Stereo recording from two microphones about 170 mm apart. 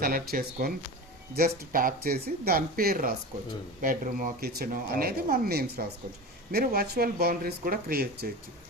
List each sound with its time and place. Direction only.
0.0 s speech: 60° right (ahead or behind)